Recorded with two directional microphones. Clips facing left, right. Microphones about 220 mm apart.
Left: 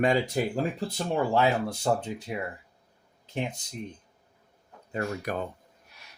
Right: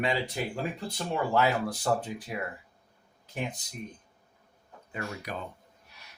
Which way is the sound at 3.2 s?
25° left (ahead or behind).